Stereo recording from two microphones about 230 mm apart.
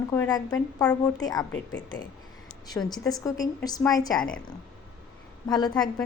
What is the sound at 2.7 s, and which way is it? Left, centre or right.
A woman's voice, centre.